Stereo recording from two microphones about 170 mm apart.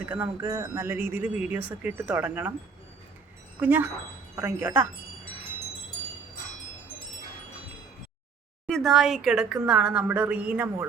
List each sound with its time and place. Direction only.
0.0 s speech: 10° right (ahead or behind)
3.6 s speech: 10° right (ahead or behind)
8.6 s speech: centre (ahead or behind)